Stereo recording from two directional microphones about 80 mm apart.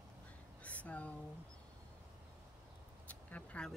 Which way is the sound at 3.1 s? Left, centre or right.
Centre.